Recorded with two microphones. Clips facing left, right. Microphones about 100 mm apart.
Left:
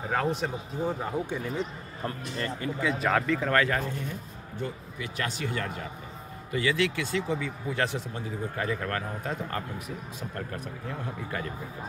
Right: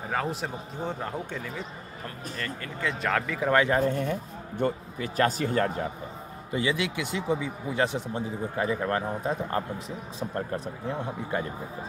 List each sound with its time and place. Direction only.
0.1 s a man's voice: centre (ahead or behind)
2.8 s a man's voice: 5° left (ahead or behind)
3.3 s speech: 15° right (ahead or behind)
3.8 s speech: 50° right (ahead or behind)
4.9 s speech: 40° right (ahead or behind)
6.5 s speech: 20° right (ahead or behind)